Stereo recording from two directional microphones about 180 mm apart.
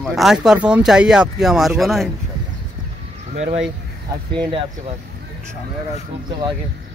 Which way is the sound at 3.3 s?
35° right (ahead or behind).